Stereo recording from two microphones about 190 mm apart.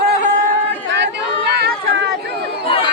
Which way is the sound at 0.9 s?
65° right (ahead or behind).